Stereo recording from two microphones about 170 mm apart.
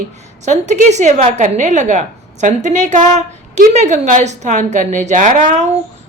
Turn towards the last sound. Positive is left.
turn(degrees=-45)  # may be behind; listen again after turning